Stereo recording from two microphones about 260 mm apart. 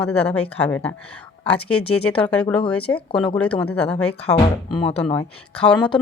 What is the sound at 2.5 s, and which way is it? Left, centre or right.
Speech, centre.